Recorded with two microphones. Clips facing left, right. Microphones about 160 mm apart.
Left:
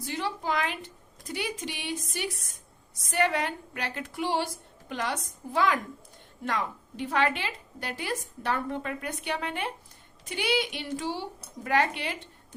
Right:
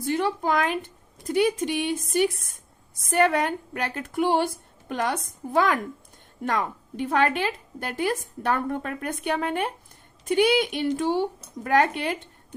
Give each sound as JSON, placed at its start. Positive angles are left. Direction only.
{"t": 0.0, "sound": "a woman's voice", "side_deg": -50}